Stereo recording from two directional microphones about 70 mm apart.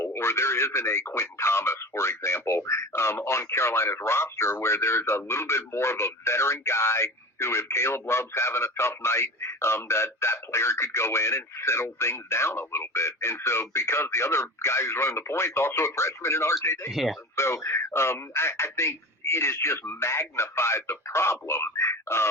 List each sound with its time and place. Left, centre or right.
0.0 s speech: left
16.9 s speech: centre
17.3 s speech: left